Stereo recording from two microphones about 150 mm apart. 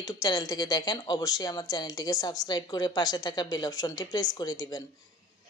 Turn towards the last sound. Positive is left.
turn(degrees=25)  # may be behind; listen again after turning